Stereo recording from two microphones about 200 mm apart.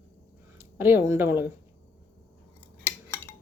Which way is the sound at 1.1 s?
10° right (ahead or behind).